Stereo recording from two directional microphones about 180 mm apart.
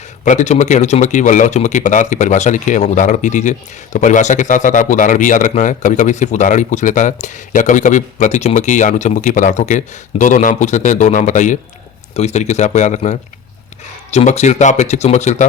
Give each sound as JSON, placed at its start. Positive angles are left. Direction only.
{"t": 0.3, "sound": "a man's voice", "side_deg": 40}